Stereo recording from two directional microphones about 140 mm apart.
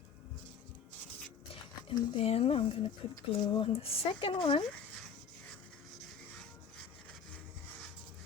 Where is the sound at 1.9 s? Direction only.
40° left (ahead or behind).